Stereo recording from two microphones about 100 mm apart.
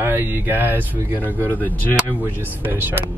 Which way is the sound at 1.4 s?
20° left (ahead or behind).